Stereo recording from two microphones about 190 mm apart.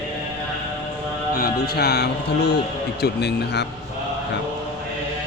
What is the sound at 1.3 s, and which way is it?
Music, 50° left (ahead or behind).